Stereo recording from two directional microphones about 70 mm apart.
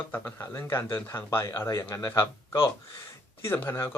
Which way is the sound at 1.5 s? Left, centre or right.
Left.